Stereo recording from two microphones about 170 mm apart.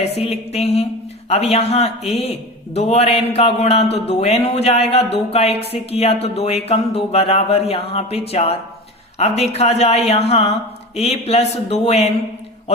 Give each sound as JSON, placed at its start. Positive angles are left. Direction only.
{"t": 0.2, "sound": "speech", "side_deg": 35}